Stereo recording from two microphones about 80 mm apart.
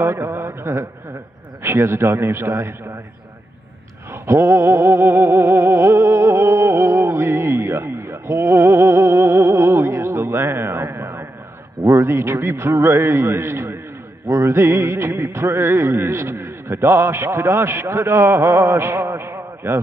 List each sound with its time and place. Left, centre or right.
0.0 s music: right
4.1 s a sound: right
11.8 s music: right